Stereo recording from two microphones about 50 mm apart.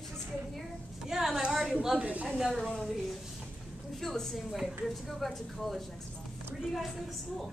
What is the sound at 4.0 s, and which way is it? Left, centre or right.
Speech, centre.